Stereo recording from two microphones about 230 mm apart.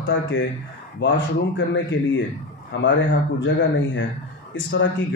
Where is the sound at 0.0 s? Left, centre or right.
Left.